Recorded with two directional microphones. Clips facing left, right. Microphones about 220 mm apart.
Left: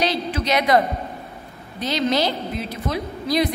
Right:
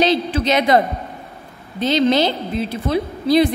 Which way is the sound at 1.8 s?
25° right (ahead or behind).